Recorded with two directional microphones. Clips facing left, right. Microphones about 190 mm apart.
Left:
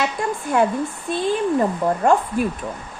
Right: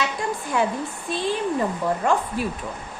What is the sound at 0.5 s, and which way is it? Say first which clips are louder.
Speech: left 5 dB; 50° left (ahead or behind).